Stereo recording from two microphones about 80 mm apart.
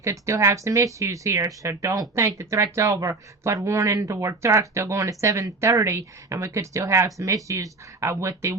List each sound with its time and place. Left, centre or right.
0.0 s speech: right